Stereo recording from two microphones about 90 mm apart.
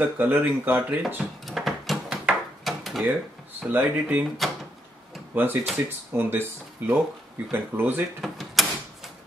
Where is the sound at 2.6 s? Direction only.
Centre (ahead or behind).